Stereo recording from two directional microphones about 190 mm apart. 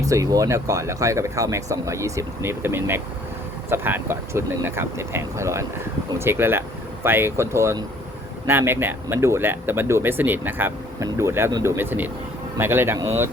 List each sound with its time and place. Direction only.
0.0 s speech: 15° right (ahead or behind)